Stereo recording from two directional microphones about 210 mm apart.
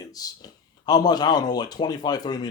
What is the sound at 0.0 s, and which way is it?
Speech, 15° left (ahead or behind).